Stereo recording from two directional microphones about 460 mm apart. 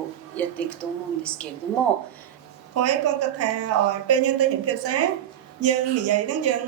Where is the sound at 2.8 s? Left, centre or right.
Right.